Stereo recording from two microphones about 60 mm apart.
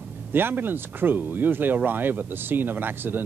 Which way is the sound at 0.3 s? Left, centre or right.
Right.